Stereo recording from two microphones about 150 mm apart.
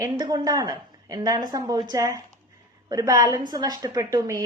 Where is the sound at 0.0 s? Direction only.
25° right (ahead or behind).